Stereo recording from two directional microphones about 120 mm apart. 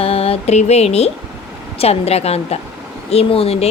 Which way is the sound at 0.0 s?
55° left (ahead or behind).